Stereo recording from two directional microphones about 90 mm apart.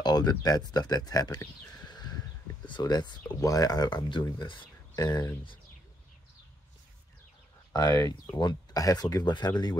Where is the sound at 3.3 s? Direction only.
40° left (ahead or behind); by 4.6 s 60° left (ahead or behind).